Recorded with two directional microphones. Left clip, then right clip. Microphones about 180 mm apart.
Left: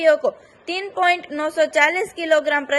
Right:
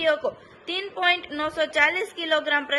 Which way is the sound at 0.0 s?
25° left (ahead or behind).